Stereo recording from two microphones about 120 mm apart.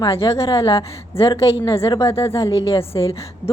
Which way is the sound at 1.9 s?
30° left (ahead or behind).